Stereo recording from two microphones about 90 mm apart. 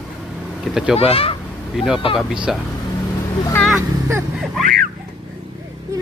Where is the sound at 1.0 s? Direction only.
90° left.